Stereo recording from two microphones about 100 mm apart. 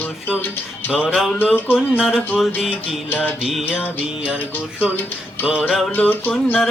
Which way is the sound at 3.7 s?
15° left (ahead or behind).